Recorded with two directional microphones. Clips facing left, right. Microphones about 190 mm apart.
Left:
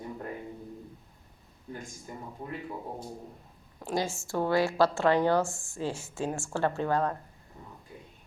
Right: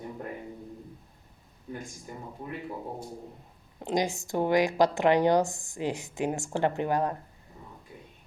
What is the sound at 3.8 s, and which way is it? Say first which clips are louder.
Speech: right 3 dB; 20° right (ahead or behind).